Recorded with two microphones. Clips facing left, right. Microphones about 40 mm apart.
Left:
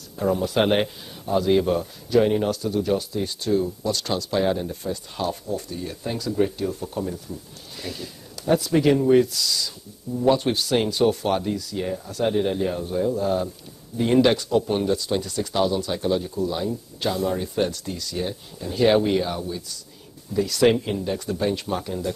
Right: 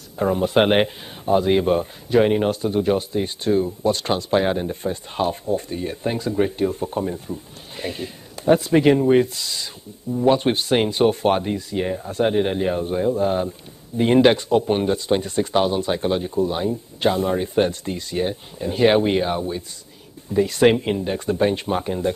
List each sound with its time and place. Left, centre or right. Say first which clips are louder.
0.2 s speech: right 3 dB; right